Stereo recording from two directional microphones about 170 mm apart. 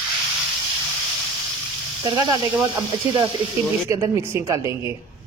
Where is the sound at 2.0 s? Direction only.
25° right (ahead or behind).